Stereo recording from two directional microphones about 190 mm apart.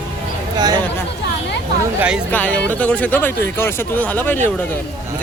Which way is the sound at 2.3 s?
10° left (ahead or behind).